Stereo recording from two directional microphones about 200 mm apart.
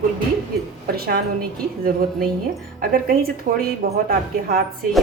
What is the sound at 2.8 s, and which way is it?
A woman's voice, 45° right (ahead or behind).